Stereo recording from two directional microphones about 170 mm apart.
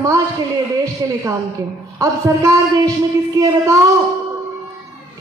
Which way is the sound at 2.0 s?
20° right (ahead or behind).